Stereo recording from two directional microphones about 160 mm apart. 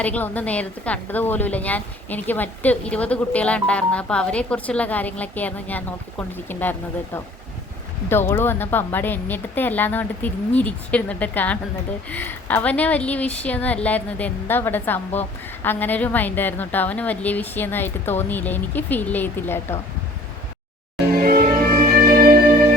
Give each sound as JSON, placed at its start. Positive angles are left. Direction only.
{"t": 0.0, "sound": "a woman's voice", "side_deg": 10}
{"t": 21.1, "sound": "music", "side_deg": -70}